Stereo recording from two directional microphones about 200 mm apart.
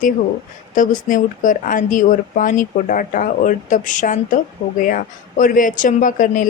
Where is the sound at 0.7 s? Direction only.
40° left (ahead or behind).